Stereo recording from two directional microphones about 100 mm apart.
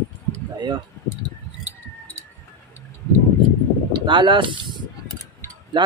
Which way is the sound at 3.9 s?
55° right (ahead or behind).